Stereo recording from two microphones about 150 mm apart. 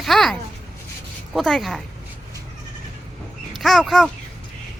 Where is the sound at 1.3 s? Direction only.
Centre (ahead or behind).